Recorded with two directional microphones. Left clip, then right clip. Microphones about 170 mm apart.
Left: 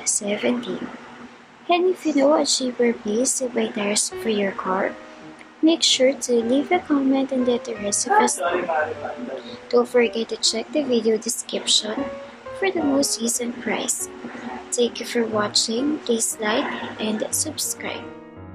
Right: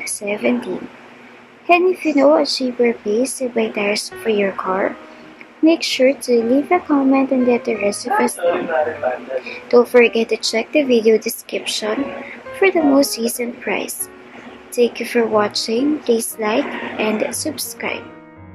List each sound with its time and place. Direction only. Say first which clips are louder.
0.0 s speech: right 3 dB; 5° right (ahead or behind)
1.7 s speech: right 6 dB; 5° right (ahead or behind)
9.7 s a woman's voice: right 7 dB; 10° right (ahead or behind)